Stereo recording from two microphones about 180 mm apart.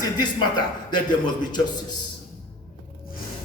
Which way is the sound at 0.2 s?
25° left (ahead or behind).